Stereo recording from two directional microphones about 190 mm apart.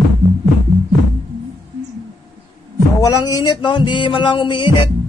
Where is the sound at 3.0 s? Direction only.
20° left (ahead or behind).